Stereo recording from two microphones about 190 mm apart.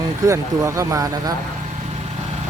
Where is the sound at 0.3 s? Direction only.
15° right (ahead or behind).